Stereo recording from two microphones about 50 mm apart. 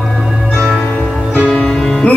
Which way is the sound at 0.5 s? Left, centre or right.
Right.